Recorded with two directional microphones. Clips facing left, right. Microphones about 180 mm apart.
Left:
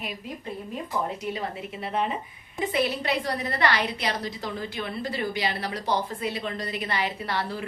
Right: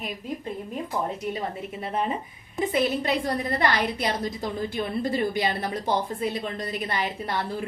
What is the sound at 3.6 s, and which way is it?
A woman's voice, 45° right (ahead or behind).